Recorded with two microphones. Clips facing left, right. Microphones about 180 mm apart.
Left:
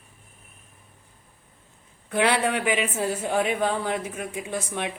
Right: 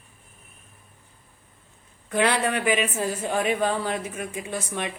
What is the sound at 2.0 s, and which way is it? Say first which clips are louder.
A man's voice: even; 15° left (ahead or behind).